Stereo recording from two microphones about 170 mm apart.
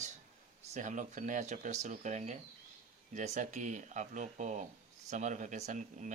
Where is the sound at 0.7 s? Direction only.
45° right (ahead or behind).